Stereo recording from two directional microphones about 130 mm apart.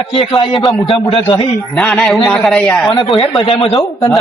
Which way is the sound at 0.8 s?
45° left (ahead or behind).